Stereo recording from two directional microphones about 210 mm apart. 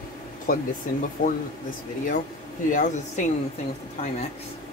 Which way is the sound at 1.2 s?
40° left (ahead or behind).